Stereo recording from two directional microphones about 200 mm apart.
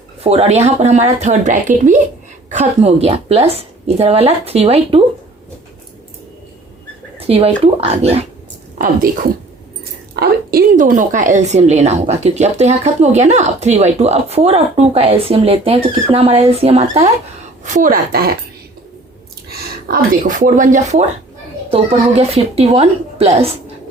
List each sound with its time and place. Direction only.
0.2 s a woman's voice: 30° right (ahead or behind)
7.2 s a woman's voice: 30° right (ahead or behind)
10.2 s a woman's voice: 45° right (ahead or behind)
17.7 s a woman's voice: 45° right (ahead or behind)
19.5 s speech: 45° right (ahead or behind)